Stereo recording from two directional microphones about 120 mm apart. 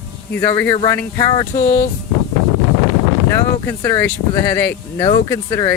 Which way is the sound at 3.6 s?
25° left (ahead or behind).